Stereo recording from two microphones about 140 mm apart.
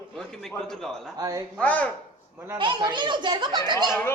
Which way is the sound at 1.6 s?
10° left (ahead or behind).